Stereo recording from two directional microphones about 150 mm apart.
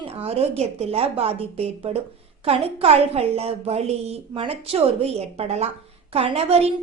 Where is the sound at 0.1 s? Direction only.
40° right (ahead or behind).